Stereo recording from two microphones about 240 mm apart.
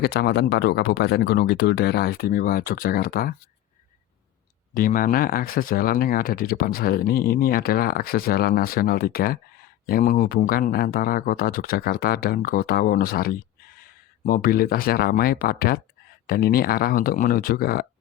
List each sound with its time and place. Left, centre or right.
0.0 s speech: left
4.7 s speech: left